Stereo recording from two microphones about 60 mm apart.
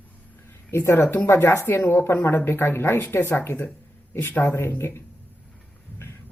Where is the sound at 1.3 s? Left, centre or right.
Left.